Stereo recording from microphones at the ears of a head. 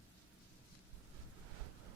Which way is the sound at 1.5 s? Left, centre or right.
Right.